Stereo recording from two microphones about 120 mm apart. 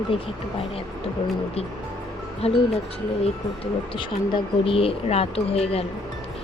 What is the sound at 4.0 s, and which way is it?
Speech, 45° left (ahead or behind).